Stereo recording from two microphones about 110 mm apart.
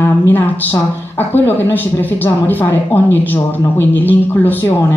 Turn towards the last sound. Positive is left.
turn(degrees=20)  # may be behind; listen again after turning